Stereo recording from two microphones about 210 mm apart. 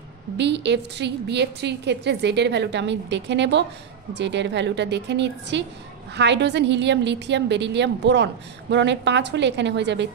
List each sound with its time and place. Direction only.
0.4 s a woman's voice: 55° right (ahead or behind)